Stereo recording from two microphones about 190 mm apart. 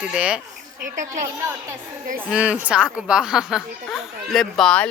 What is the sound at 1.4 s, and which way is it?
Speech, 15° right (ahead or behind).